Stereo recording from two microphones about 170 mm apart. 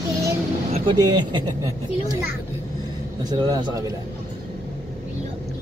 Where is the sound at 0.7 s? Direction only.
30° right (ahead or behind).